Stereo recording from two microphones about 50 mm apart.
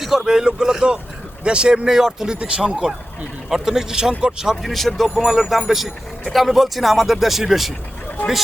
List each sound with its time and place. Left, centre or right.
0.0 s speech: centre
4.6 s speech: centre